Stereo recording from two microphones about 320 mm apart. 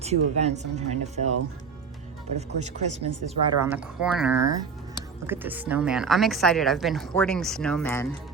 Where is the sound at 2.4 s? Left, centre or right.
Right.